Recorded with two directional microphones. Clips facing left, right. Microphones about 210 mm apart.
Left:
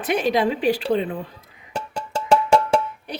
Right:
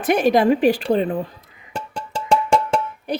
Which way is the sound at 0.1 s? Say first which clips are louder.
Right 5 dB; 50° right (ahead or behind).